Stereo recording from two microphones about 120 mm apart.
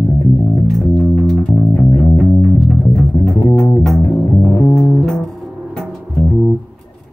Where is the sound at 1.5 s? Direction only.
30° left (ahead or behind).